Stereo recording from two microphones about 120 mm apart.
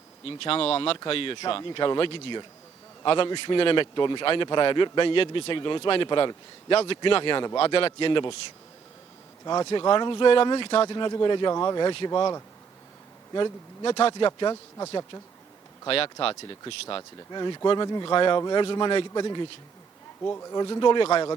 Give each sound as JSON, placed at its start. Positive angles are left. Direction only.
{"t": 0.3, "sound": "speech", "side_deg": 50}
{"t": 9.4, "sound": "speech", "side_deg": 35}
{"t": 16.9, "sound": "speech", "side_deg": 35}
{"t": 20.2, "sound": "speech", "side_deg": 25}